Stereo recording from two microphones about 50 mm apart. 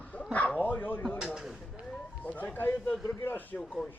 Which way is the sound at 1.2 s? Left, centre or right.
Centre.